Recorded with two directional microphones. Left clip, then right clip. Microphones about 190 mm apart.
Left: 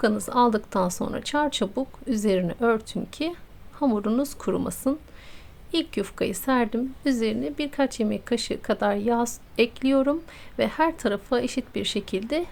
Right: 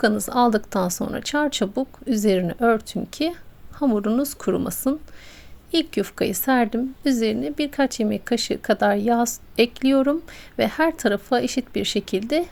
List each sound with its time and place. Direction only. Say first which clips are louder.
0.0 s a woman's voice: right 2 dB; 15° right (ahead or behind)